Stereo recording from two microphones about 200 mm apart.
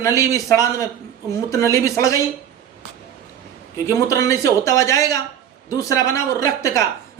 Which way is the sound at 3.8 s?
15° left (ahead or behind).